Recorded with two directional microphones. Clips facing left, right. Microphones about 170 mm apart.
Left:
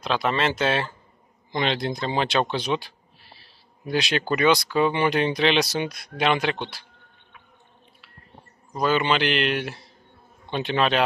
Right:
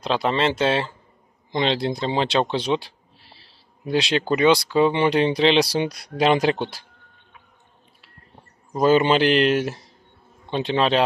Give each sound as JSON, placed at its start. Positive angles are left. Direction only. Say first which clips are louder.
{"t": 0.0, "sound": "speech", "louder": "right 2 dB", "side_deg": -30}
{"t": 8.7, "sound": "speech", "louder": "right 5 dB", "side_deg": -40}
{"t": 10.5, "sound": "speech", "louder": "right 2 dB", "side_deg": -25}